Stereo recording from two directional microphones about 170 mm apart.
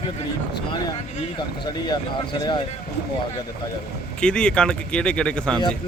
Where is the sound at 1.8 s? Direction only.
25° left (ahead or behind).